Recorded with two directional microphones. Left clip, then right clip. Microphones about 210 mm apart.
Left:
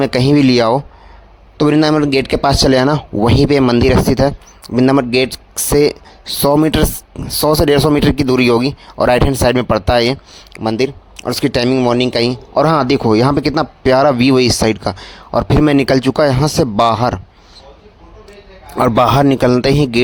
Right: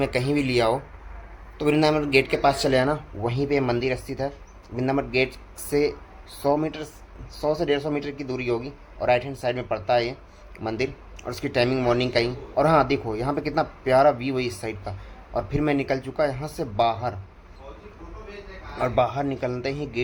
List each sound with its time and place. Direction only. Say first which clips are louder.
0.0 s speech: left 12 dB; 50° left (ahead or behind)
18.8 s speech: left 12 dB; 50° left (ahead or behind)